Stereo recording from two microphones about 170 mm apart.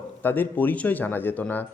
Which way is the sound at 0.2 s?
10° left (ahead or behind).